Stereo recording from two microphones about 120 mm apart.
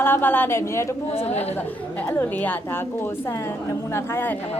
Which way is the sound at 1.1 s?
55° left (ahead or behind).